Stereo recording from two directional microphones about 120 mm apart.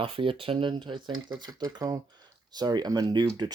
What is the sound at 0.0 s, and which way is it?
Speech, 45° right (ahead or behind).